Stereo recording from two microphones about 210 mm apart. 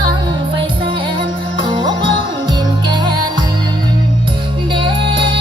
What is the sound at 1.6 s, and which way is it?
Music, 20° right (ahead or behind).